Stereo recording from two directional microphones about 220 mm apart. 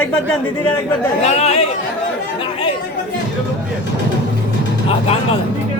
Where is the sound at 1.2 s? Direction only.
30° left (ahead or behind).